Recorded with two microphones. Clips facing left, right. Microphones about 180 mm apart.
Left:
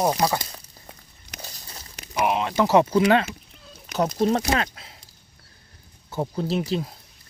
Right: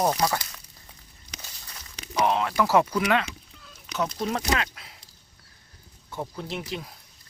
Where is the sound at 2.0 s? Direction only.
10° left (ahead or behind); by 4.3 s 40° left (ahead or behind).